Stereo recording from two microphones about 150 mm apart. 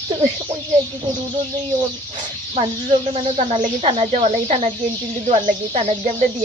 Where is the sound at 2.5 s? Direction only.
40° right (ahead or behind).